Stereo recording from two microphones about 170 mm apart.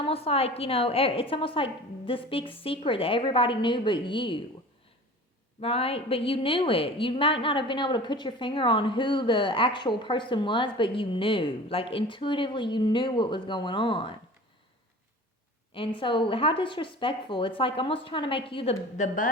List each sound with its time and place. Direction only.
0.0 s a woman's voice: 35° left (ahead or behind)
5.5 s a woman's voice: 35° left (ahead or behind)
15.7 s a woman's voice: 30° left (ahead or behind); by 19.3 s 50° left (ahead or behind)